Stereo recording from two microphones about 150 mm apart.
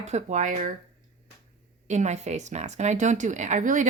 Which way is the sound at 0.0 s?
50° right (ahead or behind).